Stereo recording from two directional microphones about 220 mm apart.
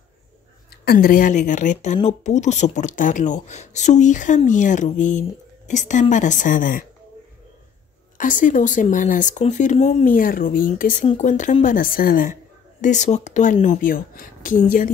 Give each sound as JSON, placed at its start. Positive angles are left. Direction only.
{"t": 0.7, "sound": "speech", "side_deg": 45}
{"t": 8.2, "sound": "speech", "side_deg": 35}